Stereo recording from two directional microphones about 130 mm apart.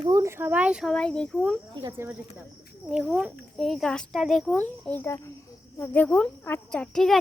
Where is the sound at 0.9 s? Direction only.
5° left (ahead or behind).